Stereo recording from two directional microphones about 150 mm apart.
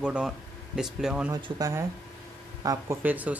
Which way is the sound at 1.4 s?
25° right (ahead or behind).